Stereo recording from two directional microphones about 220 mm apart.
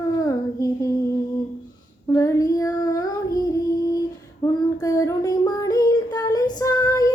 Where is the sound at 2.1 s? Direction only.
15° left (ahead or behind).